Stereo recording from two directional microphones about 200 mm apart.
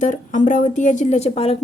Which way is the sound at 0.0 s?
40° left (ahead or behind).